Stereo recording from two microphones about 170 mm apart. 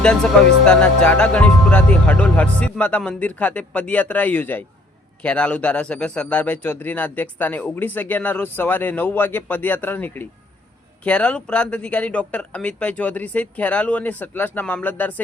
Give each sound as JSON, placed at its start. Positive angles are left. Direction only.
{"t": 0.0, "sound": "a man's voice", "side_deg": 5}